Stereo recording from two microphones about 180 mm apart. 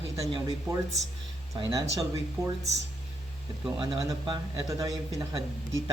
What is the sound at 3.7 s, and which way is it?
Speech, 25° right (ahead or behind).